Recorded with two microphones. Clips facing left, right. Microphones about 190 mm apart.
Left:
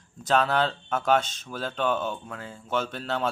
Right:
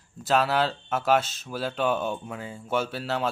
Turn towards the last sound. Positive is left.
turn(degrees=-5)  # may be behind; listen again after turning